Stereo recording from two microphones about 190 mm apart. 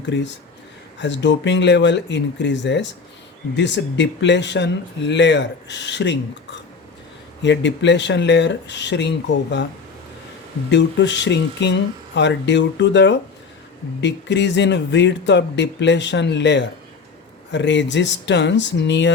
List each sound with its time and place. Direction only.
0.0 s speech: 70° left (ahead or behind)
7.4 s speech: 70° left (ahead or behind)
10.7 s speech: 65° left (ahead or behind)